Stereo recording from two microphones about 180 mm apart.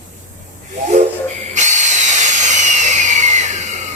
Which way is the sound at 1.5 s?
40° right (ahead or behind).